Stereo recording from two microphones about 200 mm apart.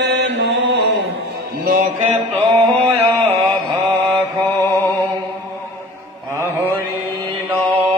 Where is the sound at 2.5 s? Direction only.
30° right (ahead or behind).